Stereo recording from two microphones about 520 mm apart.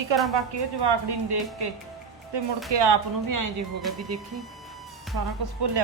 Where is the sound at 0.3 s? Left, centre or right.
Right.